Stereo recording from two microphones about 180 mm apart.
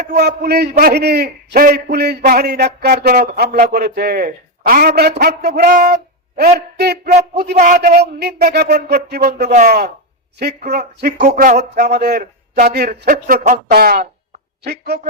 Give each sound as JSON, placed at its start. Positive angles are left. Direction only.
{"t": 0.0, "sound": "a man's voice", "side_deg": -65}
{"t": 7.1, "sound": "speech", "side_deg": -45}
{"t": 7.8, "sound": "a man's voice", "side_deg": -60}
{"t": 9.5, "sound": "speech", "side_deg": -40}
{"t": 10.3, "sound": "a man's voice", "side_deg": -65}
{"t": 11.2, "sound": "a man's voice", "side_deg": -45}
{"t": 13.7, "sound": "a man's voice", "side_deg": -60}